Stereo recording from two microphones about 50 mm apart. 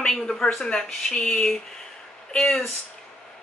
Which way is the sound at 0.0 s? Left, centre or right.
Centre.